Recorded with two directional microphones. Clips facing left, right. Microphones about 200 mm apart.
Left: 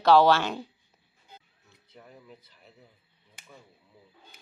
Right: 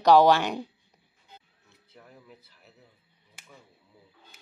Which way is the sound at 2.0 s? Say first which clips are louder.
Left 2 dB; centre (ahead or behind).